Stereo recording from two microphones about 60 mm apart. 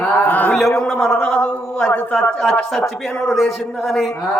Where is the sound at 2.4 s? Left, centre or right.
Centre.